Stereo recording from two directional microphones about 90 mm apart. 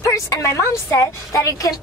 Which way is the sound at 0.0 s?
35° left (ahead or behind).